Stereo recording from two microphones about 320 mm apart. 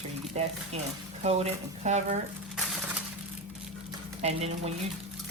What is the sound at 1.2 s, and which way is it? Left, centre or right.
Speech, right.